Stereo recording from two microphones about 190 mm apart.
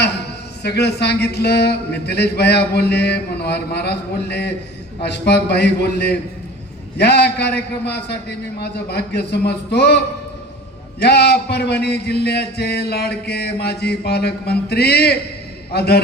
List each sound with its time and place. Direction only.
0.6 s speech: 60° left (ahead or behind)
11.0 s speech: 60° left (ahead or behind)